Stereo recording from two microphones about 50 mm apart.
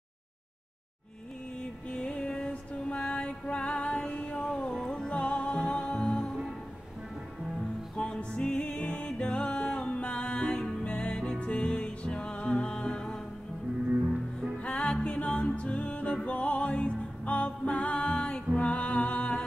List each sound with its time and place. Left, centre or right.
2.0 s music: centre
5.0 s music: left
7.9 s music: centre
14.7 s music: centre
15.5 s music: left